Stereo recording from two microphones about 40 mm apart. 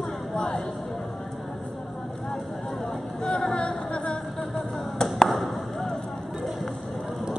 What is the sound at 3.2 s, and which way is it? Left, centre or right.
Music, left.